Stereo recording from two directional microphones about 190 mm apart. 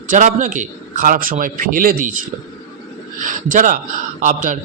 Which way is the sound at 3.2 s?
45° right (ahead or behind).